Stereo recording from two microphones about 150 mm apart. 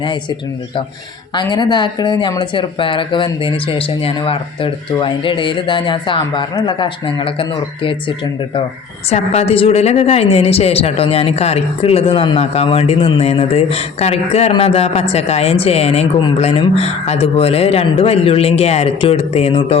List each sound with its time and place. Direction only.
1.4 s speech: 30° left (ahead or behind)
9.0 s a woman's voice: 45° left (ahead or behind)